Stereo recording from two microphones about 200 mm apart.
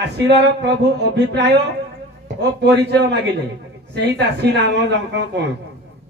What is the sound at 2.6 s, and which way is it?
Speech, 60° right (ahead or behind).